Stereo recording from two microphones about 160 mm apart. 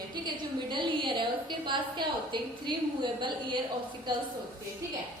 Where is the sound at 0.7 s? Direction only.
30° right (ahead or behind).